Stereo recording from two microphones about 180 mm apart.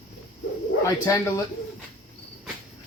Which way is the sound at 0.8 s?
20° left (ahead or behind).